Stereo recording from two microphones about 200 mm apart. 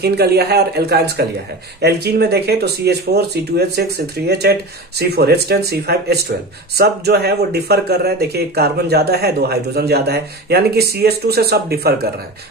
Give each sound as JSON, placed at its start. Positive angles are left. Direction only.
{"t": 0.0, "sound": "speech", "side_deg": -55}